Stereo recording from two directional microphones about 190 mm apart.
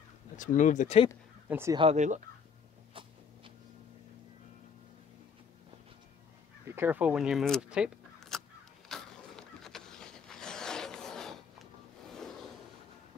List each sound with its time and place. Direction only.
0.4 s speech: 45° left (ahead or behind)
1.5 s speech: 15° right (ahead or behind)
1.8 s speech: 35° right (ahead or behind)
2.9 s a sound: 25° right (ahead or behind)
6.7 s speech: 10° right (ahead or behind)
8.8 s vehicle: 5° left (ahead or behind)